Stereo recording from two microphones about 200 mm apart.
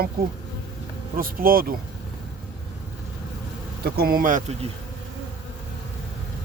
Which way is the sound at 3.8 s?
50° right (ahead or behind).